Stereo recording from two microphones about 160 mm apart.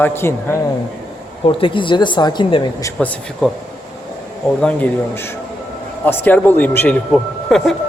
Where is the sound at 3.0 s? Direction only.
5° left (ahead or behind).